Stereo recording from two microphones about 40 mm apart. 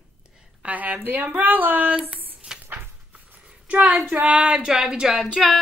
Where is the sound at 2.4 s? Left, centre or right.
Right.